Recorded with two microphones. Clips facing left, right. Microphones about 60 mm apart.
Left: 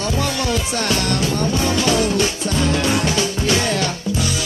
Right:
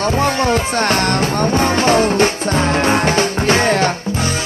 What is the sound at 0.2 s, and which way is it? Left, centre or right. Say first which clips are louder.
Music: right 6 dB; right.